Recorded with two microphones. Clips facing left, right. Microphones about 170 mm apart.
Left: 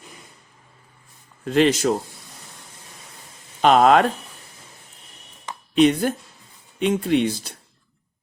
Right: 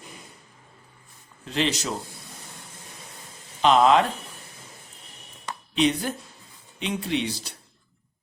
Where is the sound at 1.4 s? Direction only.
50° left (ahead or behind).